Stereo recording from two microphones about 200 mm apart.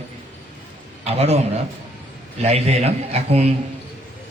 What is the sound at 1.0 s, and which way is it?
Speech, 30° right (ahead or behind).